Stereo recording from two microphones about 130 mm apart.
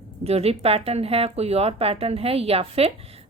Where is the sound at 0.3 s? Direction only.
50° right (ahead or behind).